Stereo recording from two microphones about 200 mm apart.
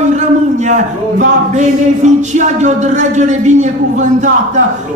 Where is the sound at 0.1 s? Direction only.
35° right (ahead or behind).